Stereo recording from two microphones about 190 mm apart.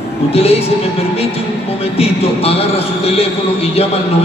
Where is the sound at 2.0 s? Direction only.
30° left (ahead or behind).